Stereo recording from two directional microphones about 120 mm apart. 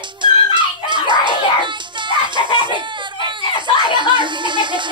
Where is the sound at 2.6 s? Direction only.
40° right (ahead or behind).